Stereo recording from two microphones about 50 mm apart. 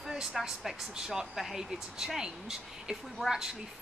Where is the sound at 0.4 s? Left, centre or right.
Centre.